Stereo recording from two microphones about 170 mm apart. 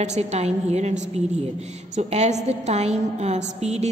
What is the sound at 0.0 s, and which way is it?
A woman's voice, 40° right (ahead or behind).